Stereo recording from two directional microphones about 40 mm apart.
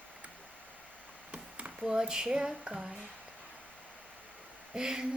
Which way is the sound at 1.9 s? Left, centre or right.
Centre.